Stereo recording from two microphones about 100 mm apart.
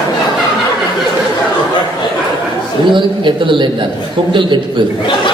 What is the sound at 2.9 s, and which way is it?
Speech, 50° right (ahead or behind).